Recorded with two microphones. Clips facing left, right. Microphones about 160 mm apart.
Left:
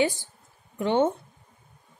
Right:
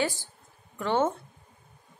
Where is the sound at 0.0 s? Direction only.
20° left (ahead or behind).